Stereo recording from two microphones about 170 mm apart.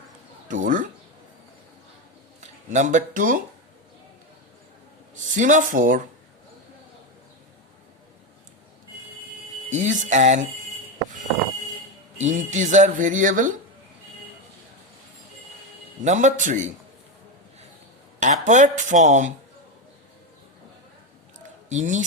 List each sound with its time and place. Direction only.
0.4 s a sound: 50° right (ahead or behind)
2.4 s speech: 45° right (ahead or behind)
5.1 s speech: 50° right (ahead or behind)
9.6 s speech: 45° right (ahead or behind)
12.2 s speech: 45° right (ahead or behind)
16.0 s speech: 45° right (ahead or behind)
18.4 s speech: 45° right (ahead or behind)
21.7 s speech: 45° right (ahead or behind)